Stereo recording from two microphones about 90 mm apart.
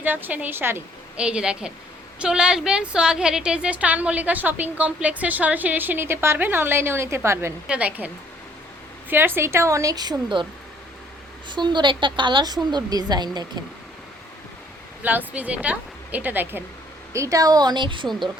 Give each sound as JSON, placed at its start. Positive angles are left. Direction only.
{"t": 0.0, "sound": "a woman's voice", "side_deg": -20}
{"t": 1.1, "sound": "a woman's voice", "side_deg": -10}
{"t": 7.7, "sound": "a woman's voice", "side_deg": -15}
{"t": 11.4, "sound": "a woman's voice", "side_deg": -60}
{"t": 15.3, "sound": "a woman's voice", "side_deg": -15}
{"t": 17.1, "sound": "a woman's voice", "side_deg": -35}